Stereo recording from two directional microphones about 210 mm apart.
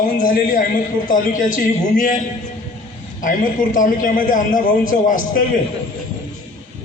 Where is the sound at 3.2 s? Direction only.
40° left (ahead or behind).